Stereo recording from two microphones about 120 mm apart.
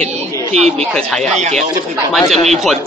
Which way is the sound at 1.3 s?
70° right (ahead or behind).